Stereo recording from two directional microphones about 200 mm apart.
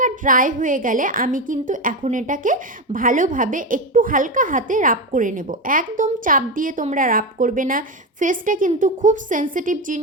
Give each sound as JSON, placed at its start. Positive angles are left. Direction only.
{"t": 0.0, "sound": "a woman's voice", "side_deg": -40}